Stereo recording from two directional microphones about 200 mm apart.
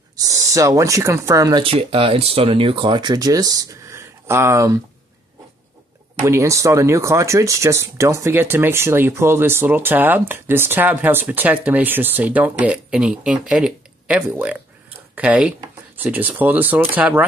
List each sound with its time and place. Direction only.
0.1 s speech: 15° right (ahead or behind)
6.2 s speech: 15° right (ahead or behind)